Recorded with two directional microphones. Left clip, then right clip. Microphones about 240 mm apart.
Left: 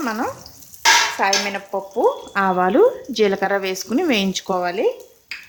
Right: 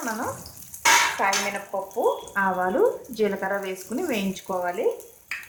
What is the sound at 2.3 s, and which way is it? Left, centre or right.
Speech, left.